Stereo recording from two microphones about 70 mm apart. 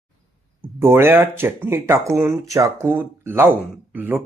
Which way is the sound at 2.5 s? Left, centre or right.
Right.